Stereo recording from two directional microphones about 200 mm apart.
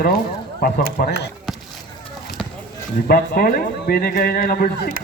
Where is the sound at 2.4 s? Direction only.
Centre (ahead or behind).